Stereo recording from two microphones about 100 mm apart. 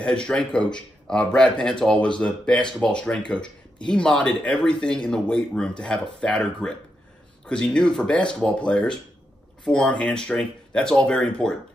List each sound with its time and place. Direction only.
0.0 s speech: 10° left (ahead or behind)